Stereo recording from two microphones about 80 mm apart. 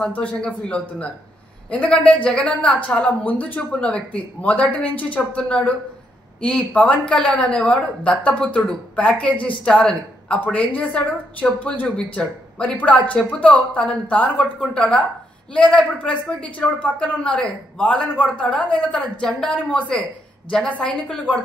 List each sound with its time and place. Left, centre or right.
0.1 s a man's voice: centre